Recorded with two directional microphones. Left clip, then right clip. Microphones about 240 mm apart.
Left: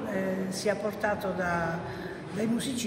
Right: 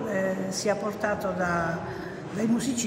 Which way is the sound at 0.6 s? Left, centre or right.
Centre.